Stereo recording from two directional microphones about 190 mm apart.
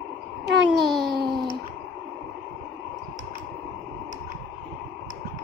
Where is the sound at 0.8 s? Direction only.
Centre (ahead or behind).